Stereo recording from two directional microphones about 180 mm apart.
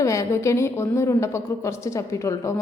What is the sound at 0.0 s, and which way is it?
A woman's voice, 15° left (ahead or behind).